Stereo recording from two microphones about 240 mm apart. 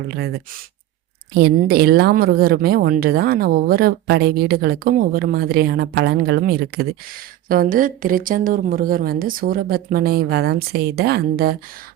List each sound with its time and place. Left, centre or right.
0.1 s speech: right